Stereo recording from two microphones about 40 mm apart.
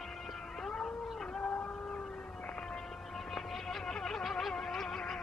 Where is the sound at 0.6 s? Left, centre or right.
Centre.